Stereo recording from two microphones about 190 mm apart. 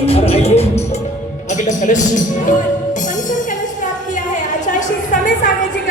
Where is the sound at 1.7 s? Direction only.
40° left (ahead or behind).